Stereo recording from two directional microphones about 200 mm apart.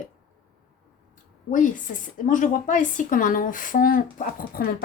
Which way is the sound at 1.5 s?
40° left (ahead or behind).